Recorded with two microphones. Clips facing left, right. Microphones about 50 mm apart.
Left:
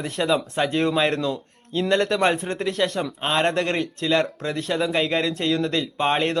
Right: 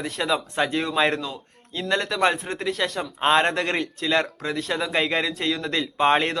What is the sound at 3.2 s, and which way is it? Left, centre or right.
Speech, centre.